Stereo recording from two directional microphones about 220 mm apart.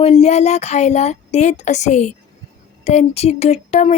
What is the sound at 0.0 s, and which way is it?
A child's voice, 30° left (ahead or behind).